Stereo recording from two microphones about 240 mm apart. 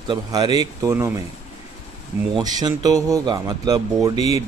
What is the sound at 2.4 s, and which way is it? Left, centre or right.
Speech, centre.